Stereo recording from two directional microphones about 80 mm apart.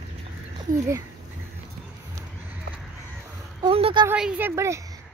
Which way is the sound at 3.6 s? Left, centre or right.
Right.